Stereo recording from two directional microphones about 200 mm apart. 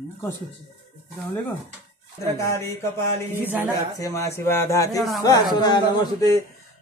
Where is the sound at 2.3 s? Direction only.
15° left (ahead or behind).